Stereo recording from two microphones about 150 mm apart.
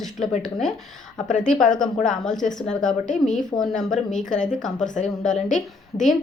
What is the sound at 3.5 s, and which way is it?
Speech, 25° left (ahead or behind).